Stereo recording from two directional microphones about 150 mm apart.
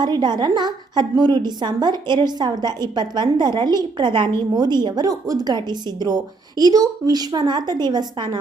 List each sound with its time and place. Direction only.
0.0 s a woman's voice: 30° right (ahead or behind)